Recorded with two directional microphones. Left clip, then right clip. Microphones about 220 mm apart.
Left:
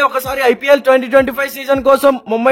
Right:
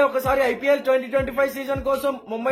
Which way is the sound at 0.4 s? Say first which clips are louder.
Left 14 dB; 45° left (ahead or behind).